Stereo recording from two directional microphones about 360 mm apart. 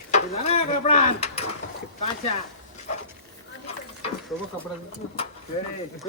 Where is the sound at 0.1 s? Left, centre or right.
Centre.